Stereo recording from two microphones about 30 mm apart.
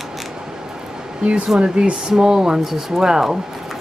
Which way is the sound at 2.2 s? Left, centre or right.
Right.